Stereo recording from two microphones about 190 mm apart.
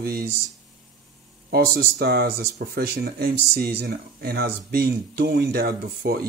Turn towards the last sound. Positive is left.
turn(degrees=-55)  # may be behind; listen again after turning